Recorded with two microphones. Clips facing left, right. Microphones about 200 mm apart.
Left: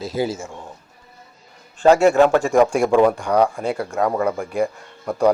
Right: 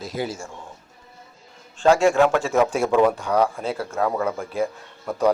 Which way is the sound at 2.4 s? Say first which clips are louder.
Left 4 dB; 15° left (ahead or behind).